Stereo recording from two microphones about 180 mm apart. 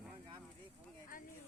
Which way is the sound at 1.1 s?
50° left (ahead or behind).